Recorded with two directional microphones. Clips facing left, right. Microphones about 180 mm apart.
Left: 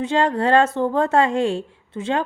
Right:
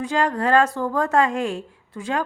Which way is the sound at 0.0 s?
25° left (ahead or behind).